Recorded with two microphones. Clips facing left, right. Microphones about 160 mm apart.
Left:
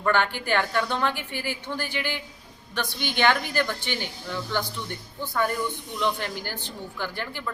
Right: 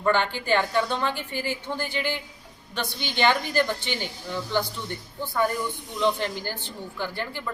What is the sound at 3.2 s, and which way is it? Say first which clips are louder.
Speech: right 1 dB; 15° right (ahead or behind).